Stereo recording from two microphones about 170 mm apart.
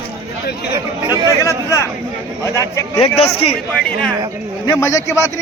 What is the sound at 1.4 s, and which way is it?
A man's voice, 20° left (ahead or behind).